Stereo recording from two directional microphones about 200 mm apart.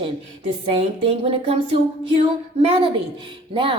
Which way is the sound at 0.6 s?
30° right (ahead or behind).